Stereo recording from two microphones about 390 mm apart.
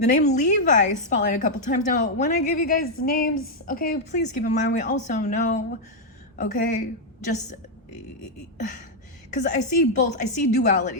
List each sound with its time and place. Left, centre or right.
0.0 s a woman's voice: centre
8.5 s a woman's voice: centre